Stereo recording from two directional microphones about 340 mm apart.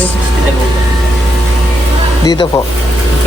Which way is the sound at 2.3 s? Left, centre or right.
Centre.